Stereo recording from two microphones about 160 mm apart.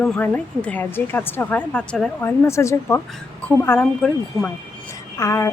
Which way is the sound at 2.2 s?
15° left (ahead or behind).